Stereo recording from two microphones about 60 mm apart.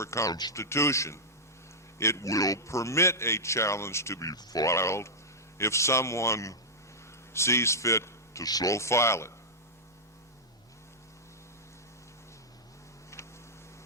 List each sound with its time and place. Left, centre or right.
0.0 s a man's voice: left
13.1 s vehicle: left